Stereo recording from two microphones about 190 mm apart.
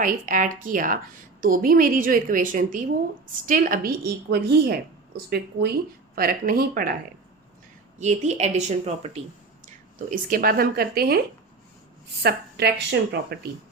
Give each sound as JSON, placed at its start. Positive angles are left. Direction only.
{"t": 0.0, "sound": "a woman's voice", "side_deg": -45}
{"t": 6.1, "sound": "a woman's voice", "side_deg": -50}
{"t": 7.9, "sound": "a woman's voice", "side_deg": -35}
{"t": 10.1, "sound": "a woman's voice", "side_deg": -45}
{"t": 12.2, "sound": "speech", "side_deg": -60}